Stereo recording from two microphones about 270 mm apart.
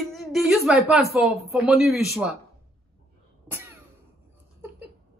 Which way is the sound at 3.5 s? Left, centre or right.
Centre.